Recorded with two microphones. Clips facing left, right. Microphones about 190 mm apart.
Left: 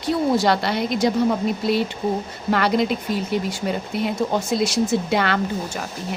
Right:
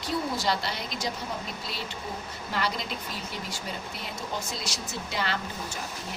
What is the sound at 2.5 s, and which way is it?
Speech, 65° left (ahead or behind).